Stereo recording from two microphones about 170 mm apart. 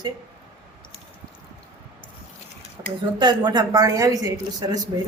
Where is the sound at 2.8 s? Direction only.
20° right (ahead or behind).